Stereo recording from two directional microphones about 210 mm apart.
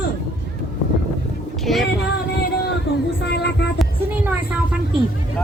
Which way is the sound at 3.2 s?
55° left (ahead or behind).